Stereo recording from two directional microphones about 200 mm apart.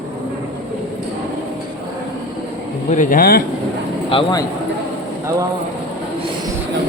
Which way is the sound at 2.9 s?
40° left (ahead or behind).